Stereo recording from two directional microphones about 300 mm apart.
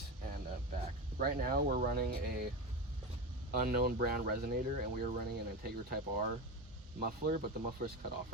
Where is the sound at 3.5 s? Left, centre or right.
Right.